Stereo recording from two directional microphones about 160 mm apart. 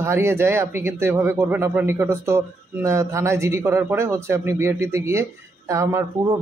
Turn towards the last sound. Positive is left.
turn(degrees=-15)  # may be behind; listen again after turning